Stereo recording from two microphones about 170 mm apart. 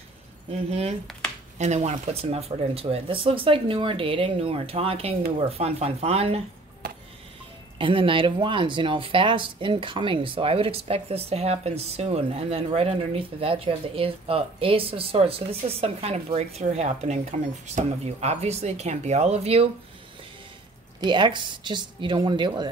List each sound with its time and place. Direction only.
0.7 s speech: 40° right (ahead or behind)
7.8 s speech: 30° right (ahead or behind)
21.0 s speech: 25° right (ahead or behind)